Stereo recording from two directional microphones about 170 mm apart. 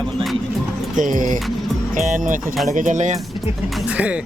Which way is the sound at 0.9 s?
50° right (ahead or behind).